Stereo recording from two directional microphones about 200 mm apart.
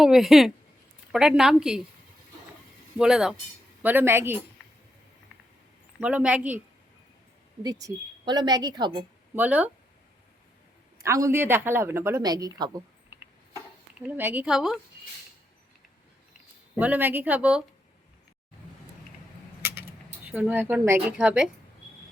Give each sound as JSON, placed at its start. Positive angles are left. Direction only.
{"t": 0.0, "sound": "a woman's voice", "side_deg": 0}
{"t": 3.0, "sound": "a woman's voice", "side_deg": -5}
{"t": 6.0, "sound": "speech", "side_deg": -5}
{"t": 7.6, "sound": "a woman's voice", "side_deg": -20}
{"t": 9.3, "sound": "speech", "side_deg": -10}
{"t": 10.9, "sound": "speech", "side_deg": -15}
{"t": 14.2, "sound": "a woman's voice", "side_deg": -10}
{"t": 16.7, "sound": "speech", "side_deg": -10}
{"t": 20.2, "sound": "speech", "side_deg": -5}